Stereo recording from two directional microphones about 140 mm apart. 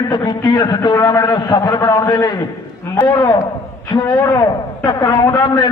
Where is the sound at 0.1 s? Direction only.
30° left (ahead or behind).